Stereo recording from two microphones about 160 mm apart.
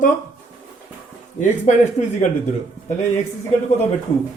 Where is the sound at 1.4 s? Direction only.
50° left (ahead or behind).